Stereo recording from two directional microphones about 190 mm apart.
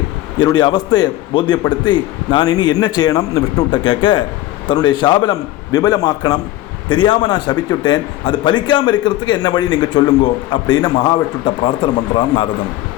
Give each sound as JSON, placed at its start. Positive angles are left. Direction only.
{"t": 0.3, "sound": "a man's voice", "side_deg": 25}